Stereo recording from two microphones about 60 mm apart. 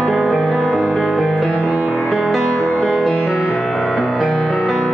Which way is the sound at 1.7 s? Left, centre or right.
Right.